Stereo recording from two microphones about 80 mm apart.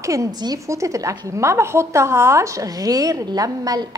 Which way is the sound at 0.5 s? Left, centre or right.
Right.